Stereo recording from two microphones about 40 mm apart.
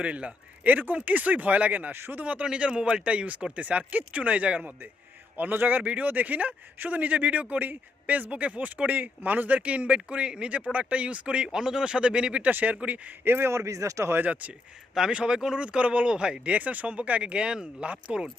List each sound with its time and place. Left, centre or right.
0.0 s speech: right
0.6 s a man's voice: right
1.9 s speech: right
2.2 s speech: right
5.4 s a man's voice: right
5.8 s speech: right
10.5 s speech: right
11.4 s speech: centre
12.4 s a man's voice: right
12.6 s speech: right
13.2 s speech: right
15.1 s speech: right